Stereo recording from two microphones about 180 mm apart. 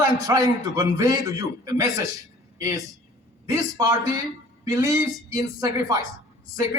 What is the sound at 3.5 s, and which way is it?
Speech, 20° right (ahead or behind).